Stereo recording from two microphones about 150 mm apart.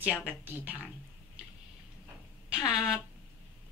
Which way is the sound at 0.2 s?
10° right (ahead or behind).